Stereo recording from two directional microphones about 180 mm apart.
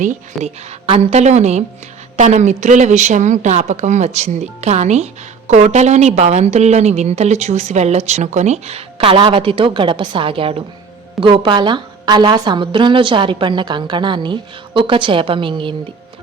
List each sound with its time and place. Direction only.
0.4 s a woman's voice: centre (ahead or behind)
0.9 s a woman's voice: 35° right (ahead or behind)